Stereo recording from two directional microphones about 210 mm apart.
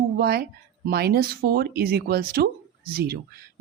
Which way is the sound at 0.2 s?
45° right (ahead or behind).